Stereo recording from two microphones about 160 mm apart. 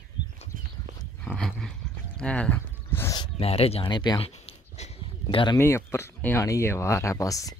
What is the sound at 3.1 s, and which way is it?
Speech, 35° left (ahead or behind).